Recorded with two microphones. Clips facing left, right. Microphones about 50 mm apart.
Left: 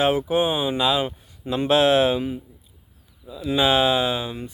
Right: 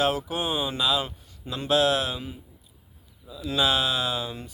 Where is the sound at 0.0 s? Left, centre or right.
Left.